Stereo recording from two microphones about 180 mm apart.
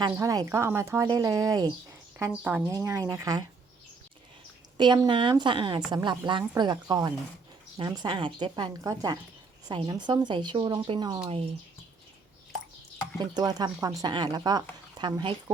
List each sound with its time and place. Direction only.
0.0 s a woman's voice: 20° right (ahead or behind)
2.3 s a woman's voice: 5° right (ahead or behind)
2.6 s speech: 15° right (ahead or behind)
4.8 s a woman's voice: 25° right (ahead or behind)
13.1 s a woman's voice: 20° right (ahead or behind)